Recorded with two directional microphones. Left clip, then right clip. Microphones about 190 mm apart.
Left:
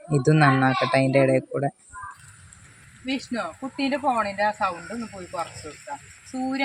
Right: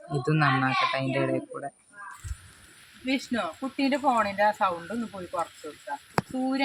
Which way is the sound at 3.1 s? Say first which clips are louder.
Even; 5° left (ahead or behind).